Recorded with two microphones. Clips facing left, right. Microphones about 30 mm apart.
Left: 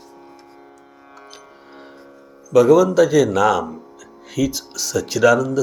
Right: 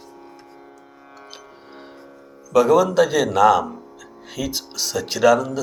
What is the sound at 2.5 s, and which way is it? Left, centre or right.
Speech, centre.